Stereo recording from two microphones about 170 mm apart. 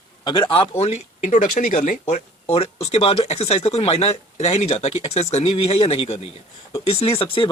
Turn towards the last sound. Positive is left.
turn(degrees=30)  # may be behind; listen again after turning